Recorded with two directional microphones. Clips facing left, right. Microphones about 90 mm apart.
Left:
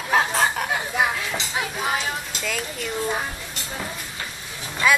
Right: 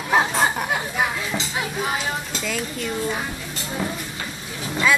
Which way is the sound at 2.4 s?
5° right (ahead or behind).